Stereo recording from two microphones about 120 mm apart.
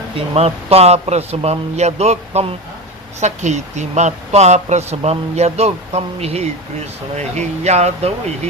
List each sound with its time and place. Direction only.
0.2 s a man's voice: 60° right (ahead or behind)
3.2 s speech: 75° right (ahead or behind)